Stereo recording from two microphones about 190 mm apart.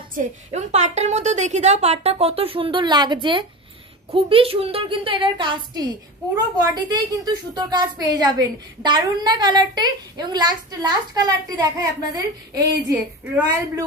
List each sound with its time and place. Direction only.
0.1 s a woman's voice: 35° right (ahead or behind); by 12.7 s 20° right (ahead or behind)